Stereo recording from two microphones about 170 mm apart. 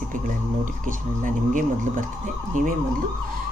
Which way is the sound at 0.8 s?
50° right (ahead or behind).